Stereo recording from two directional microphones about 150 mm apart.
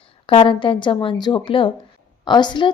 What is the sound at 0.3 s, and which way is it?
A woman's voice, 35° left (ahead or behind).